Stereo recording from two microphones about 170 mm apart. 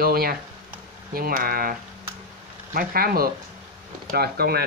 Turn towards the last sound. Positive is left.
turn(degrees=-65)  # may be behind; listen again after turning